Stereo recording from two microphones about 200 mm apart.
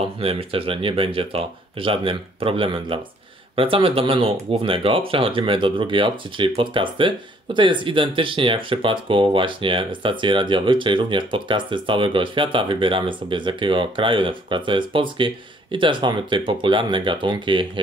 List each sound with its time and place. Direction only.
0.0 s speech: 30° right (ahead or behind)